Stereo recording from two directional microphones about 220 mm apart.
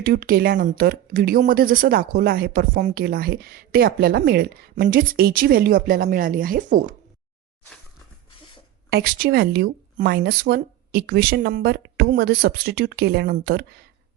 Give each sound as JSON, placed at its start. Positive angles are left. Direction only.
{"t": 0.0, "sound": "speech", "side_deg": -45}
{"t": 8.9, "sound": "speech", "side_deg": -45}